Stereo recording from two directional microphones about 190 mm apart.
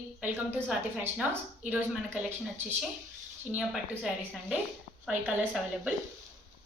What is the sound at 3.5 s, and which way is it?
A woman's voice, centre (ahead or behind).